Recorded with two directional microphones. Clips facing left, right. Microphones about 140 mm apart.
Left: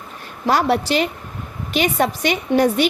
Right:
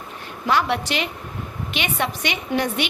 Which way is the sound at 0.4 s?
35° left (ahead or behind).